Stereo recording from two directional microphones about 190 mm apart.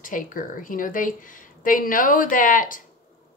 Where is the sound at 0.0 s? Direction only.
45° left (ahead or behind).